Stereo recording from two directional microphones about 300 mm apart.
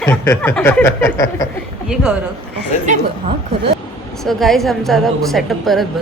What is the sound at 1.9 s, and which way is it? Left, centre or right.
Speech, centre.